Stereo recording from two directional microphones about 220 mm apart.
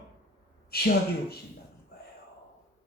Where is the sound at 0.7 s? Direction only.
45° left (ahead or behind).